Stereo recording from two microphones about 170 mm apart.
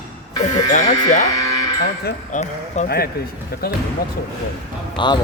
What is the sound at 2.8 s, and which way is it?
Speech, 65° left (ahead or behind).